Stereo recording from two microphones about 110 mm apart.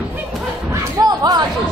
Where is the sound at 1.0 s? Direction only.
40° right (ahead or behind).